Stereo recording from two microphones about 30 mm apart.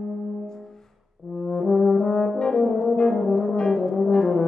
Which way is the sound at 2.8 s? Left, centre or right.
Left.